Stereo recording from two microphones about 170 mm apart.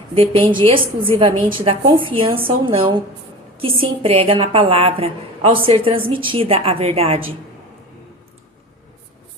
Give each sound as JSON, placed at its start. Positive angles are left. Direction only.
{"t": 0.1, "sound": "a woman's voice", "side_deg": -30}